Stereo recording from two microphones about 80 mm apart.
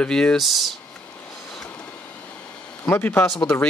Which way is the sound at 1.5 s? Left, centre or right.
Centre.